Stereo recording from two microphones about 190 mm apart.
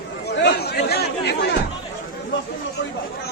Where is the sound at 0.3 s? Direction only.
60° left (ahead or behind).